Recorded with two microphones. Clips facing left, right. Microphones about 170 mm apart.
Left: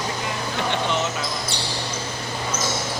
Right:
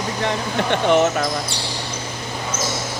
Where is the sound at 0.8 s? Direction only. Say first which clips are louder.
Right 13 dB; 55° right (ahead or behind).